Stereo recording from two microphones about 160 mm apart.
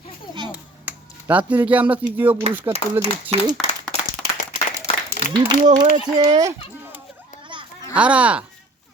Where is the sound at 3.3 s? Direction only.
45° right (ahead or behind).